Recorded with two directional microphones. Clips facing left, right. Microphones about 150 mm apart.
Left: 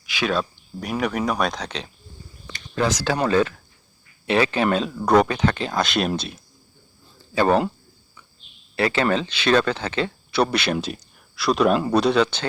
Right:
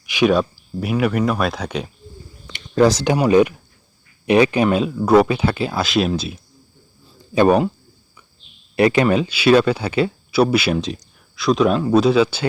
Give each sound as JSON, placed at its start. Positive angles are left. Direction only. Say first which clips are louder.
{"t": 0.0, "sound": "a sound", "louder": "right 8 dB", "side_deg": -15}
{"t": 0.5, "sound": "speech", "louder": "right 6 dB", "side_deg": -5}
{"t": 2.7, "sound": "speech", "louder": "right 8 dB", "side_deg": -35}
{"t": 3.2, "sound": "speech", "louder": "right 6 dB", "side_deg": -15}
{"t": 7.3, "sound": "speech", "louder": "right 4 dB", "side_deg": -15}
{"t": 8.7, "sound": "speech", "louder": "right 6 dB", "side_deg": -15}